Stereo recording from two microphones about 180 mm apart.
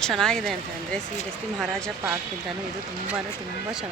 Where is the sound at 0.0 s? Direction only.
5° left (ahead or behind).